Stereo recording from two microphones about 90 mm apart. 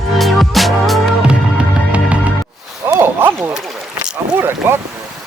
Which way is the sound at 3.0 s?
25° right (ahead or behind).